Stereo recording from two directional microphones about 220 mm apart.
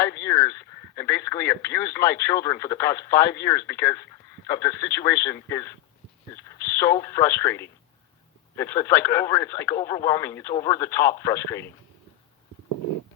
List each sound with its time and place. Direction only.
0.2 s radio: 10° left (ahead or behind)
3.7 s speech: 10° left (ahead or behind)